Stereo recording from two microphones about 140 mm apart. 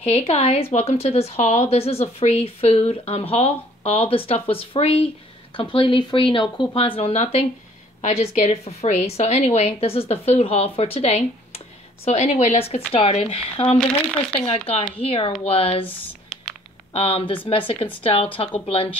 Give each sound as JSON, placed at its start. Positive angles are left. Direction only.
{"t": 0.1, "sound": "a woman's voice", "side_deg": 45}
{"t": 15.0, "sound": "a woman's voice", "side_deg": 45}
{"t": 16.9, "sound": "a woman's voice", "side_deg": 45}